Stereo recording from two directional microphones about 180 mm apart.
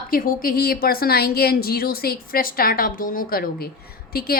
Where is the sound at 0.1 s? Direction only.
50° left (ahead or behind).